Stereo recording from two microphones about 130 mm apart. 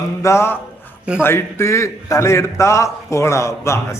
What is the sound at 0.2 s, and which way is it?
A man's voice, 20° left (ahead or behind).